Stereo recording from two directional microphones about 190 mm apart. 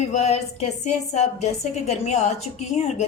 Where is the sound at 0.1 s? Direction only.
35° left (ahead or behind).